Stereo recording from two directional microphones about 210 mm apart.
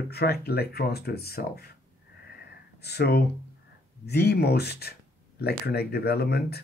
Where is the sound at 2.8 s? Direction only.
50° left (ahead or behind).